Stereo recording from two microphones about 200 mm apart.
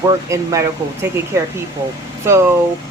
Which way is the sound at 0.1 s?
15° right (ahead or behind).